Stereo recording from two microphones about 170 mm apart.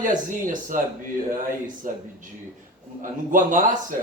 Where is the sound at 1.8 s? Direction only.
50° right (ahead or behind).